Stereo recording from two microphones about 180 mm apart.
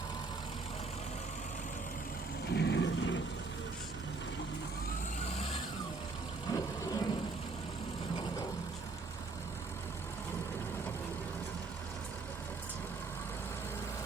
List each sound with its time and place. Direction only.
2.5 s vehicle: 70° left (ahead or behind)
6.5 s vehicle: 20° left (ahead or behind)